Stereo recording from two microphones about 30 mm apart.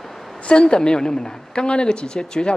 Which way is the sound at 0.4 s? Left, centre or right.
Left.